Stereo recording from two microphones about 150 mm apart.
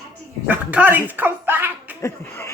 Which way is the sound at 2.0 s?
15° left (ahead or behind).